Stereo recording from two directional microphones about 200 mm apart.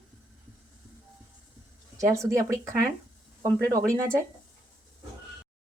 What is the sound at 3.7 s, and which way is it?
Speech, 15° right (ahead or behind).